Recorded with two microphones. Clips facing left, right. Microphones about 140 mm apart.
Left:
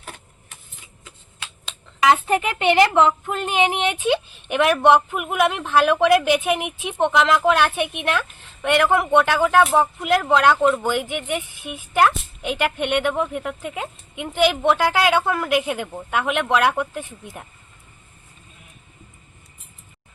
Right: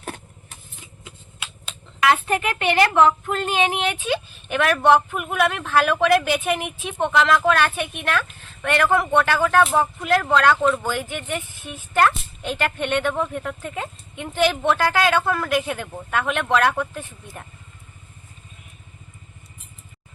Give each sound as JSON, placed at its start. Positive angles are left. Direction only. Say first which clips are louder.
{"t": 2.0, "sound": "a woman's voice", "louder": "left 2 dB", "side_deg": 20}